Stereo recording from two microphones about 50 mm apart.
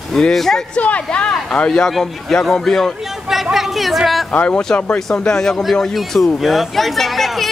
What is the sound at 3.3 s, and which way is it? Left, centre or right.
Speech, centre.